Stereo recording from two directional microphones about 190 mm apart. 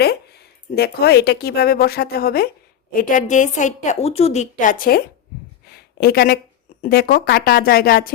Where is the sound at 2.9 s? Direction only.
40° left (ahead or behind).